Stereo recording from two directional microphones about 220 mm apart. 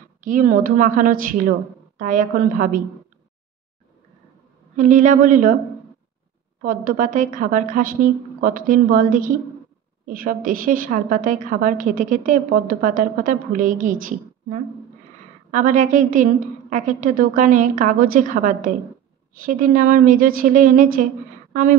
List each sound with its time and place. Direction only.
0.2 s a woman's voice: 35° right (ahead or behind)
4.7 s a woman's voice: 35° right (ahead or behind)
6.6 s a woman's voice: 40° right (ahead or behind)